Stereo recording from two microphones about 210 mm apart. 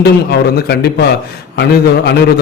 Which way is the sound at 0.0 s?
50° left (ahead or behind).